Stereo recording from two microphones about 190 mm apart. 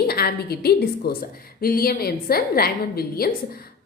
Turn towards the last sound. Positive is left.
turn(degrees=55)  # may be behind; listen again after turning